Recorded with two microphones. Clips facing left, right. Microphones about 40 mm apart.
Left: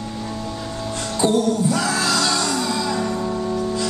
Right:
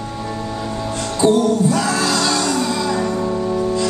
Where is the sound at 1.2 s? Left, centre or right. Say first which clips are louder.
Right 4 dB; centre.